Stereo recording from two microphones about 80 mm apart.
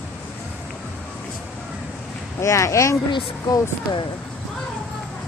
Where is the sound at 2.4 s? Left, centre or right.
Left.